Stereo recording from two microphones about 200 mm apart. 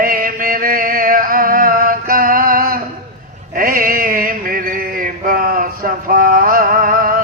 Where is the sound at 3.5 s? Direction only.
45° right (ahead or behind).